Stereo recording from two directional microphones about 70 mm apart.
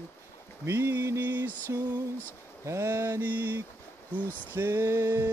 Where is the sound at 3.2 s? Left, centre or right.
Right.